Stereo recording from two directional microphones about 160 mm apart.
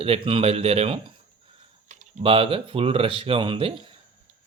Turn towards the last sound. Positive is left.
turn(degrees=-35)  # may be behind; listen again after turning